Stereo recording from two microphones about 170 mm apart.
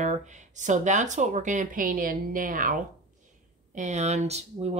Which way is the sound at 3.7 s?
45° right (ahead or behind).